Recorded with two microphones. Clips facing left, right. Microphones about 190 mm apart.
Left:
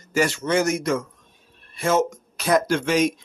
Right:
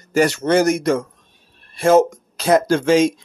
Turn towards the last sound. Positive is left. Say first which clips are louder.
# right 6 dB
turn(degrees=-30)  # may be behind; listen again after turning